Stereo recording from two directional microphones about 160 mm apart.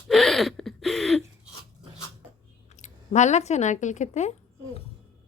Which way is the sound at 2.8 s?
45° left (ahead or behind).